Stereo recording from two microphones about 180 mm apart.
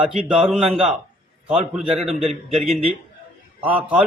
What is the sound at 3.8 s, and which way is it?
Speech, 10° right (ahead or behind).